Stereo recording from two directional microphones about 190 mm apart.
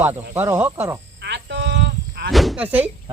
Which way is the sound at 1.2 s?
65° right (ahead or behind).